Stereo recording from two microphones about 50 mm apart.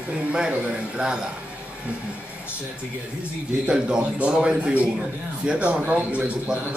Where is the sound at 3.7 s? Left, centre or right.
Centre.